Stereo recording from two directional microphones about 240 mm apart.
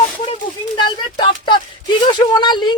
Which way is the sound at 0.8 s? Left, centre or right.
Centre.